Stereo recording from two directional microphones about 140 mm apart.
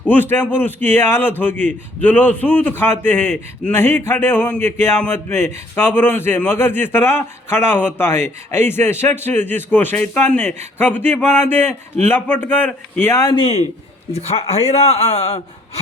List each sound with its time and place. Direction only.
0.1 s a man's voice: 15° left (ahead or behind)
13.3 s a man's voice: 40° left (ahead or behind)